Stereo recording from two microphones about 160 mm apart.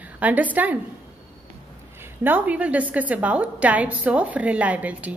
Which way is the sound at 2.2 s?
10° right (ahead or behind).